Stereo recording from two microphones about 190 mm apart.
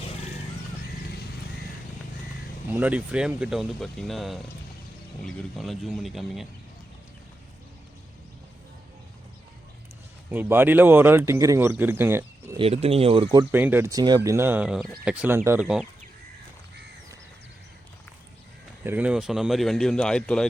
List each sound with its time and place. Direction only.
2.6 s speech: 10° right (ahead or behind)
10.3 s speech: 10° right (ahead or behind)
12.5 s speech: 30° right (ahead or behind)
13.5 s speech: 10° right (ahead or behind)
18.8 s speech: 10° right (ahead or behind)